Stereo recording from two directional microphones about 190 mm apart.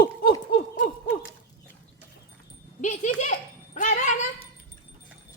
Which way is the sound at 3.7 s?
40° left (ahead or behind).